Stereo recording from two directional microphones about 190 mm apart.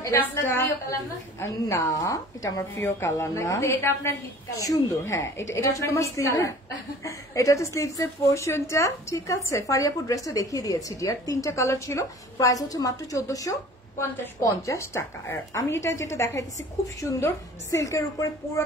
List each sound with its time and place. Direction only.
0.3 s a woman's voice: 15° left (ahead or behind)